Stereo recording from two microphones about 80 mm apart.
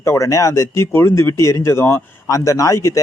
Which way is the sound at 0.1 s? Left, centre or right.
Left.